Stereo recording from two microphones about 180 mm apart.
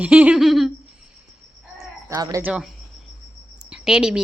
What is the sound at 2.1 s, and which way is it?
Speech, 20° right (ahead or behind).